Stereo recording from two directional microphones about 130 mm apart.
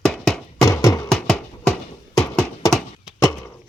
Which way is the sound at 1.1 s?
5° left (ahead or behind).